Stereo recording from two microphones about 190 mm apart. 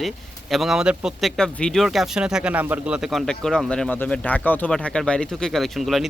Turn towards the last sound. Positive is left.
turn(degrees=0)  # may be behind; listen again after turning